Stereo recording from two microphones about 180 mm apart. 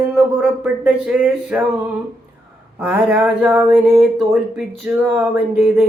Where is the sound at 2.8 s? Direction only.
10° right (ahead or behind).